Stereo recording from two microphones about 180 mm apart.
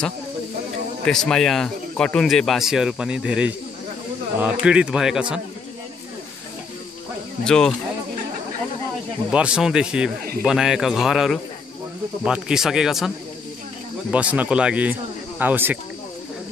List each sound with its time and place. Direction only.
1.0 s speech: 5° left (ahead or behind)
7.4 s speech: 5° left (ahead or behind)
9.3 s speech: 5° right (ahead or behind)
14.1 s speech: 10° right (ahead or behind)